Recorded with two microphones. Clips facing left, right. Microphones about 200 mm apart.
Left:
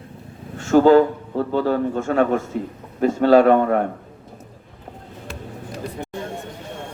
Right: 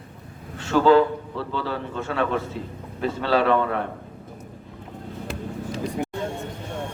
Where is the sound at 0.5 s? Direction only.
45° left (ahead or behind).